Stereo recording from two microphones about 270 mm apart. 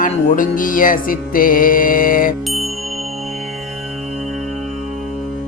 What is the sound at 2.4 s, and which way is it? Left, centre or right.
Music, centre.